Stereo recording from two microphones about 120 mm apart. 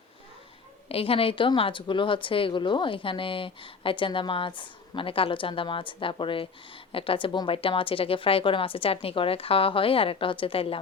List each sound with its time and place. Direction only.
0.9 s a woman's voice: 55° left (ahead or behind)